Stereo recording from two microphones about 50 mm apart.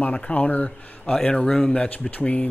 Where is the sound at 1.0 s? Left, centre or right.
Centre.